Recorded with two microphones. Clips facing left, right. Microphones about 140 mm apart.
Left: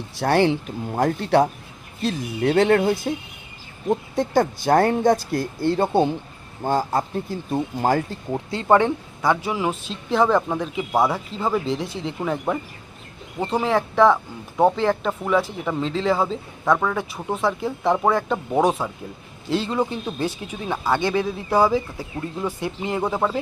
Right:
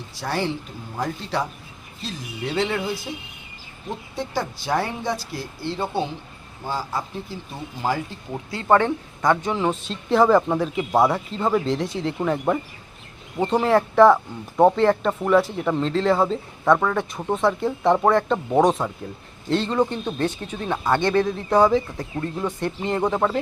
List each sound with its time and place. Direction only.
0.2 s speech: 60° left (ahead or behind); by 8.0 s 45° left (ahead or behind)
8.3 s speech: 25° left (ahead or behind)
8.6 s speech: 10° left (ahead or behind)